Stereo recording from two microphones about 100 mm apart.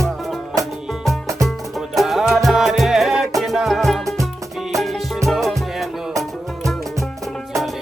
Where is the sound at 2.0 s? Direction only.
Centre (ahead or behind).